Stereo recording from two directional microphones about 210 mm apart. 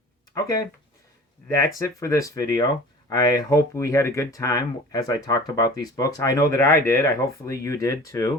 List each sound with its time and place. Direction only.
0.3 s speech: 15° left (ahead or behind)